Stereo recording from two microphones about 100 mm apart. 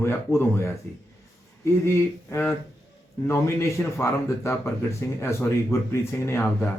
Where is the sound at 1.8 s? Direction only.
25° left (ahead or behind).